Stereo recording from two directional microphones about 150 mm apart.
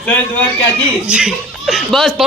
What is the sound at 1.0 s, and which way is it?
Speech, 5° right (ahead or behind).